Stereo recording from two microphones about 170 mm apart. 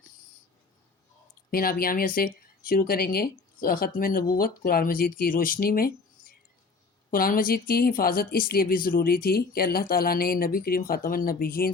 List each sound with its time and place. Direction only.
1.5 s speech: 60° left (ahead or behind)